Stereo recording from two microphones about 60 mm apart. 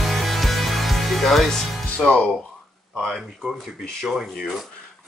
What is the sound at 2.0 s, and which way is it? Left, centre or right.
Speech, centre.